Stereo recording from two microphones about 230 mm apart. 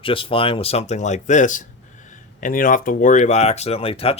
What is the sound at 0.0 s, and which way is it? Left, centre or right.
Speech, left.